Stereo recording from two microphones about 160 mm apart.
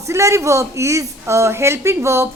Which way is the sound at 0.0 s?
20° right (ahead or behind).